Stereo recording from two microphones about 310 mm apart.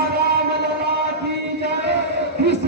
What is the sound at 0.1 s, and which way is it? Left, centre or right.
Music, right.